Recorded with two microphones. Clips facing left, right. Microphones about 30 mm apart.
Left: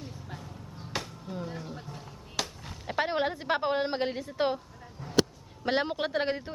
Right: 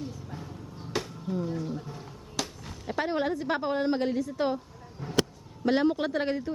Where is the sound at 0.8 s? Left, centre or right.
Centre.